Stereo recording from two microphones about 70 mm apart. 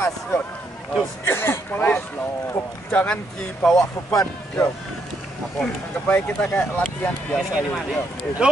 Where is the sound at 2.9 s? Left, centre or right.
Centre.